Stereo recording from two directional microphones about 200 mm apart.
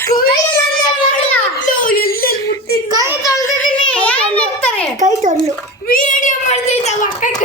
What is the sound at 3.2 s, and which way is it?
Speech, 15° left (ahead or behind).